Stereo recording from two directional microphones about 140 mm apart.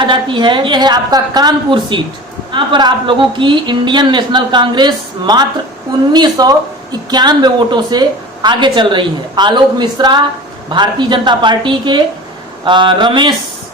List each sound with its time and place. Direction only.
0.0 s a woman's voice: 35° right (ahead or behind)